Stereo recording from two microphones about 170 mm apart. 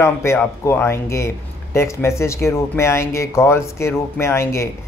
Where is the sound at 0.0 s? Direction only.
15° left (ahead or behind).